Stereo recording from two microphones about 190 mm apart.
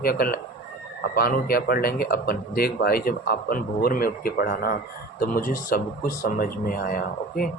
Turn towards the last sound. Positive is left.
turn(degrees=50)  # may be behind; listen again after turning